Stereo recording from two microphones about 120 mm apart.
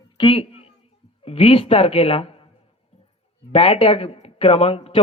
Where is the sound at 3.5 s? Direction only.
55° left (ahead or behind).